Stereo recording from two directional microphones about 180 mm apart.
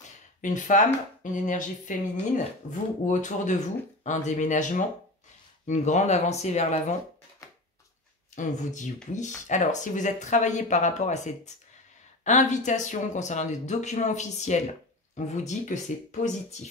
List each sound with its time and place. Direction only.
0.4 s speech: 45° left (ahead or behind)
8.4 s speech: 45° left (ahead or behind)